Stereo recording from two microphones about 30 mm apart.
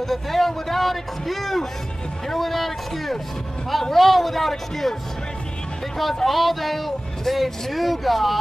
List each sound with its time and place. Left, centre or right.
0.0 s speech: centre
6.2 s speech: centre